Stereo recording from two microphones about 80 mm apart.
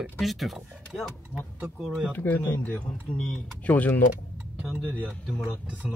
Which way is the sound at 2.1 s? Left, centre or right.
Left.